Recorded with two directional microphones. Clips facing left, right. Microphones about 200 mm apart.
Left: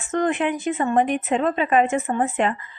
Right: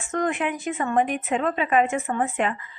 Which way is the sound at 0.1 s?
30° left (ahead or behind).